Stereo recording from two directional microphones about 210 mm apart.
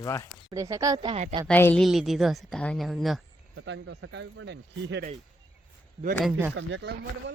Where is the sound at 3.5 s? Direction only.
60° right (ahead or behind).